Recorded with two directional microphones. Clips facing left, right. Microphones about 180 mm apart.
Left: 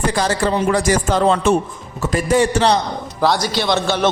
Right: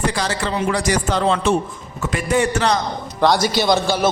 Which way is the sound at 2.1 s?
35° left (ahead or behind).